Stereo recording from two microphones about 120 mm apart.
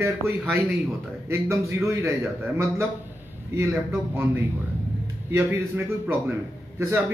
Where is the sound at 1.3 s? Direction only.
25° right (ahead or behind).